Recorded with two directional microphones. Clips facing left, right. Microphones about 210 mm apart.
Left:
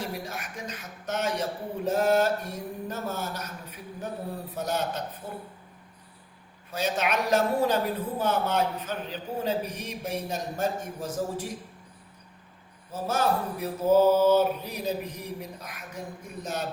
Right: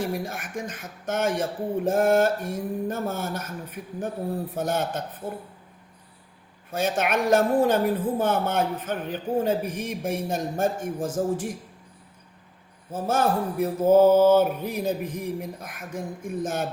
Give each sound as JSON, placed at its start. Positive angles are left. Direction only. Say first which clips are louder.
{"t": 0.0, "sound": "a woman's voice", "louder": "right 6 dB", "side_deg": -50}
{"t": 4.5, "sound": "a woman's voice", "louder": "even", "side_deg": -50}
{"t": 6.7, "sound": "a woman's voice", "louder": "right 3 dB", "side_deg": -50}
{"t": 12.9, "sound": "a woman's voice", "louder": "right 3 dB", "side_deg": -50}